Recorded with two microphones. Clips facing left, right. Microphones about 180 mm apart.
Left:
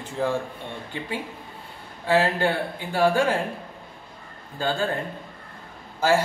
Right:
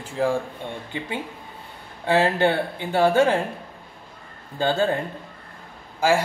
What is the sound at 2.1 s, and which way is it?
Speech, 25° right (ahead or behind).